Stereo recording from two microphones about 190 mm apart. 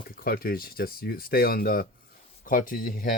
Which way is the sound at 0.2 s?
50° left (ahead or behind).